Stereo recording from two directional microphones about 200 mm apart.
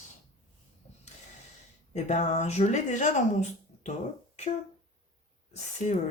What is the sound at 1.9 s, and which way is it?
Speech, 35° left (ahead or behind).